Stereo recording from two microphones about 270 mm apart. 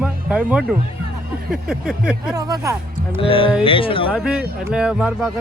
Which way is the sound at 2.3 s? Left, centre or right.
Centre.